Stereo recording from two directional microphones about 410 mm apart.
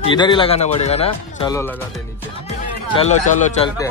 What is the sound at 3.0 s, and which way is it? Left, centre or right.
Speech, centre.